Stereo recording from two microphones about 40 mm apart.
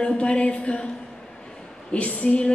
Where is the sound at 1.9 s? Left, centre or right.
Left.